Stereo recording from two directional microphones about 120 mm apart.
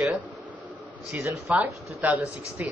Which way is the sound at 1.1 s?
20° right (ahead or behind).